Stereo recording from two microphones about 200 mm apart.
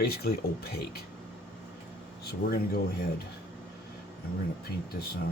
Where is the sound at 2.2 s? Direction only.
50° left (ahead or behind).